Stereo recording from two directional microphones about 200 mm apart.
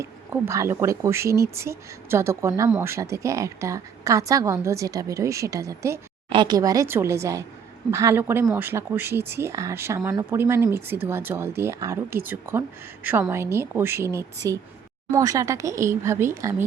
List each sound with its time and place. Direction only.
0.0 s speech: 15° right (ahead or behind)